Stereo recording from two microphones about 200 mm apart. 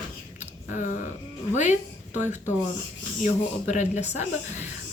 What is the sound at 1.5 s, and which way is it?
Speech, 35° left (ahead or behind).